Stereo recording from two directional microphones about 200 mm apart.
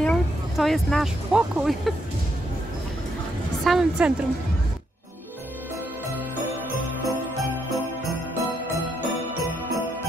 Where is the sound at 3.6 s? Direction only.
5° right (ahead or behind).